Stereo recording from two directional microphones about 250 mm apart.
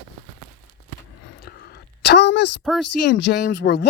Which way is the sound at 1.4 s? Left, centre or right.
Left.